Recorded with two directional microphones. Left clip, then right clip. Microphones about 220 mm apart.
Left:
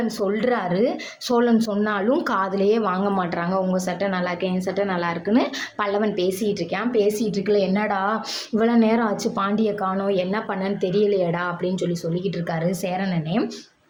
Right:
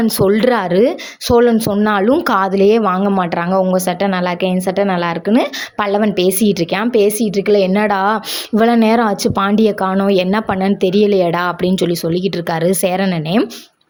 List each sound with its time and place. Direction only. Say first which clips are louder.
0.0 s speech: right 10 dB; 45° right (ahead or behind)